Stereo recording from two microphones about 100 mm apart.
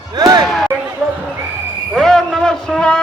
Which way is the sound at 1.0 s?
10° right (ahead or behind).